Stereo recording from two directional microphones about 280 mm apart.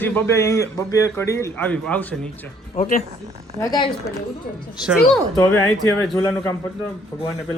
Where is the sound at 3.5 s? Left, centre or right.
Centre.